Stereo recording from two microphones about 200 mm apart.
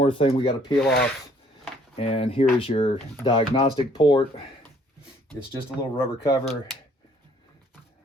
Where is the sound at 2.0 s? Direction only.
30° left (ahead or behind).